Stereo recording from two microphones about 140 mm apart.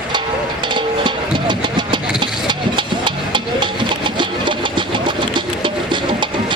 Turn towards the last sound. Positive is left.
turn(degrees=-35)  # may be behind; listen again after turning